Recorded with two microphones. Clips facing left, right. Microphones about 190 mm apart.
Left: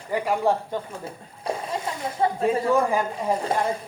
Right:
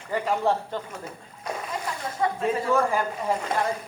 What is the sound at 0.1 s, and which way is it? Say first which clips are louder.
Speech: left 2 dB; 10° left (ahead or behind).